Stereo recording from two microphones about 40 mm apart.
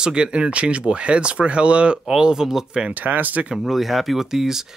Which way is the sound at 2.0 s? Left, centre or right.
Centre.